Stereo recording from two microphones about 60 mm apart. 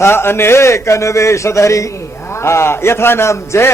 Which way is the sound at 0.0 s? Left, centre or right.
Left.